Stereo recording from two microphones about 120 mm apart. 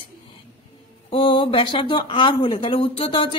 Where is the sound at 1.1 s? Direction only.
45° left (ahead or behind).